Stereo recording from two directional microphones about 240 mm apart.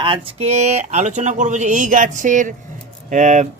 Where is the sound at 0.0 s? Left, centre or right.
Right.